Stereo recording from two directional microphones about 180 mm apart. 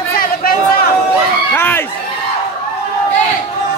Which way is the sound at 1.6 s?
10° left (ahead or behind).